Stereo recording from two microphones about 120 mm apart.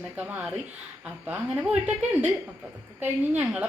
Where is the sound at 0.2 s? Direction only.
10° right (ahead or behind).